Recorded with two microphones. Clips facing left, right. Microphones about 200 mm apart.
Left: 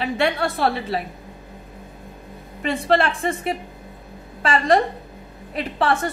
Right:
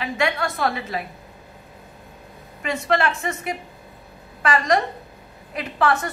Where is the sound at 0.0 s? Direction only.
35° left (ahead or behind).